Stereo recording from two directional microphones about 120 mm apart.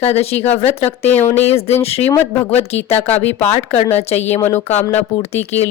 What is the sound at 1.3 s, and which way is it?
Speech, 60° left (ahead or behind).